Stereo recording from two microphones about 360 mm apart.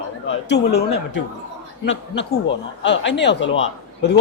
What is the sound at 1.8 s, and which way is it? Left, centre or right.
Speech, left.